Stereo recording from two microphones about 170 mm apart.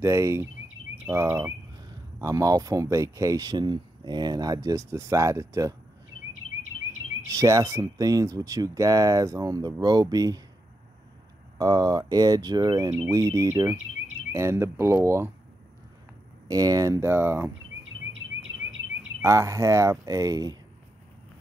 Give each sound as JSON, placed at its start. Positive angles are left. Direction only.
{"t": 0.0, "sound": "speech", "side_deg": -15}
{"t": 7.2, "sound": "speech", "side_deg": -20}
{"t": 11.5, "sound": "speech", "side_deg": -20}
{"t": 16.4, "sound": "speech", "side_deg": -20}
{"t": 18.4, "sound": "bird vocalization", "side_deg": -90}
{"t": 19.2, "sound": "speech", "side_deg": -20}